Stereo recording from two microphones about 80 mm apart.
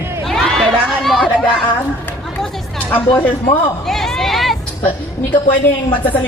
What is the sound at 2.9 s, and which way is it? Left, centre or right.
Speech, left.